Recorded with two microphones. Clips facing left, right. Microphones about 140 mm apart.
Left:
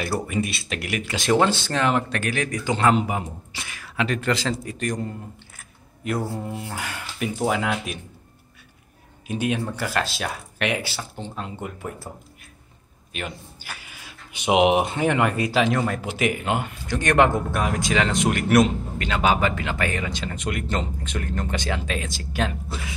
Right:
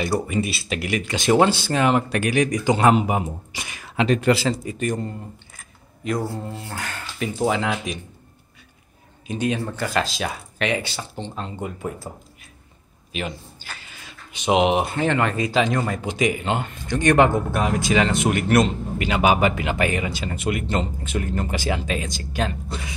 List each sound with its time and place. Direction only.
0.0 s speech: centre (ahead or behind)
1.5 s speech: 10° right (ahead or behind)
4.3 s speech: 5° right (ahead or behind)
5.6 s speech: 5° left (ahead or behind)
9.3 s speech: 10° left (ahead or behind)
13.6 s speech: 10° left (ahead or behind)
19.0 s speech: 15° right (ahead or behind); by 22.9 s 5° left (ahead or behind)